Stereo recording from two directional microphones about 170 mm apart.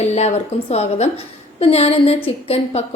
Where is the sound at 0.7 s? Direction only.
40° left (ahead or behind).